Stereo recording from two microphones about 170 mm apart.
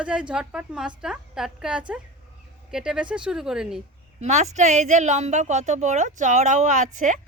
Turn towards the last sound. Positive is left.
turn(degrees=-45)  # may be behind; listen again after turning